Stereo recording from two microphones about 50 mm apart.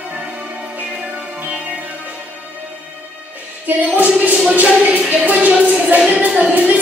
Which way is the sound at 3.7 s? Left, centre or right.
Right.